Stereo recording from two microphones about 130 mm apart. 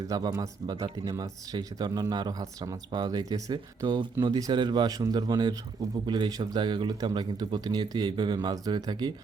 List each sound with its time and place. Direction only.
0.1 s speech: 30° right (ahead or behind)